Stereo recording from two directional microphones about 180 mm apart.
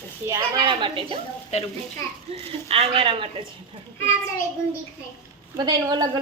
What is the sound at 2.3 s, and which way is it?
Speech, 35° right (ahead or behind).